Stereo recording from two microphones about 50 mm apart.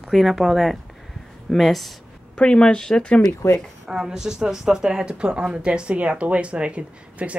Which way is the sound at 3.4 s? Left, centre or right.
Left.